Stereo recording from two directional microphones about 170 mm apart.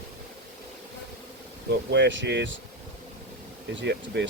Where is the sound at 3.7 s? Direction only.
90° right.